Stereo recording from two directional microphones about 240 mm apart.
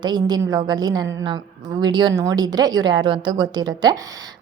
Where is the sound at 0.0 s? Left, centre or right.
Centre.